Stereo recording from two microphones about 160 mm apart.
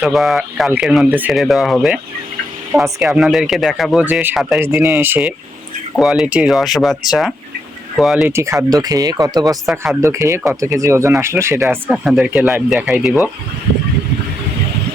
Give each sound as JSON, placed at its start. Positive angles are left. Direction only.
{"t": 0.0, "sound": "speech", "side_deg": 0}
{"t": 2.7, "sound": "speech", "side_deg": -15}
{"t": 3.2, "sound": "speech", "side_deg": -5}
{"t": 4.6, "sound": "speech", "side_deg": -15}
{"t": 6.0, "sound": "speech", "side_deg": 0}
{"t": 8.3, "sound": "speech", "side_deg": -20}
{"t": 11.9, "sound": "speech", "side_deg": -5}